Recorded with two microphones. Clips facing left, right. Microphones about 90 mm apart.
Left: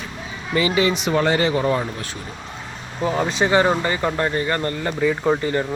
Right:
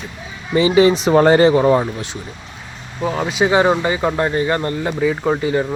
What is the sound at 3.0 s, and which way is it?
Speech, 5° right (ahead or behind).